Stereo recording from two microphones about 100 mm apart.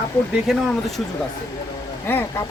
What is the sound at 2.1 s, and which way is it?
Speech, 20° left (ahead or behind).